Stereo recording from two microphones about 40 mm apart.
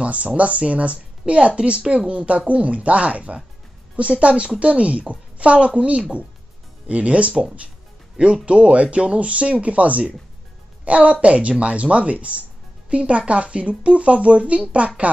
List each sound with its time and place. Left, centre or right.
0.0 s speech: right